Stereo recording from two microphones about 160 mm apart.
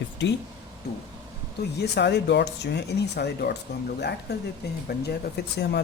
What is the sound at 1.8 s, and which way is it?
Speech, 90° left.